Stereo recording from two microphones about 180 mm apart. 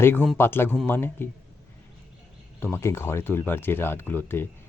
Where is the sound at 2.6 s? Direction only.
15° left (ahead or behind).